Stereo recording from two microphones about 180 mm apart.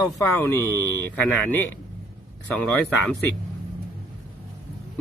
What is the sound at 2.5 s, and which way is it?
Speech, 5° left (ahead or behind).